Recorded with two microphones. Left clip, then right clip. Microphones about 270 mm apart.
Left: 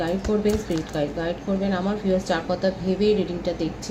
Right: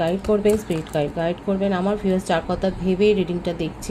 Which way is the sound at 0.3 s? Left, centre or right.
Right.